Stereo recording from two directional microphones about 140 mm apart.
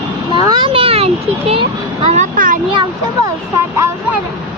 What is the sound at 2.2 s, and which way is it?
Speech, 70° right (ahead or behind).